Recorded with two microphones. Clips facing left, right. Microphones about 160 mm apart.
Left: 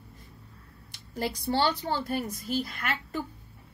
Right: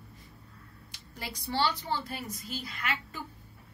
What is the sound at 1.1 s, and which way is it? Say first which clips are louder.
A woman's voice: left 6 dB; 50° left (ahead or behind).